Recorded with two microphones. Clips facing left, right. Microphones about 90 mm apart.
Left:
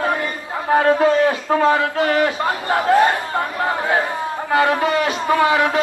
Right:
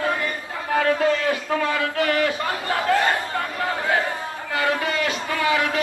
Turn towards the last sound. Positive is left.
turn(degrees=20)  # may be behind; listen again after turning